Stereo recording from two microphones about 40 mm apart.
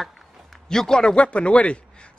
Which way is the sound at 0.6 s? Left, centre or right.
Centre.